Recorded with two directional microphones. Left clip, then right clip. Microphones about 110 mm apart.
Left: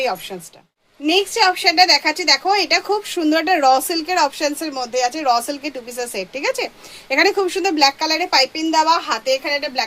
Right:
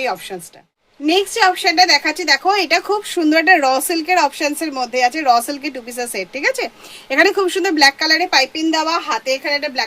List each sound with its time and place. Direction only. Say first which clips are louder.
0.0 s a woman's voice: even; 35° right (ahead or behind)